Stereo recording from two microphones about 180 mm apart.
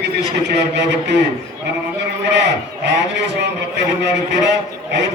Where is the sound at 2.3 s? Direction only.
75° right (ahead or behind).